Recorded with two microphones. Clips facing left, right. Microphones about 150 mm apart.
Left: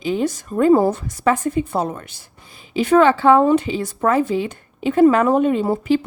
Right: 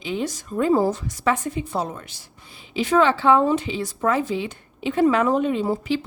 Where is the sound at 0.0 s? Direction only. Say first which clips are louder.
Left 6 dB; 45° left (ahead or behind).